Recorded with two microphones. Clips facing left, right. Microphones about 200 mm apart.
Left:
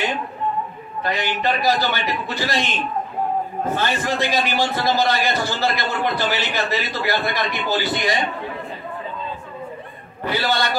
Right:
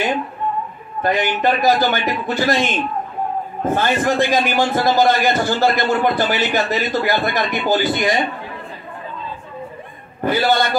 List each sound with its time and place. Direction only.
1.0 s a man's voice: 50° right (ahead or behind)
10.2 s a man's voice: 50° right (ahead or behind)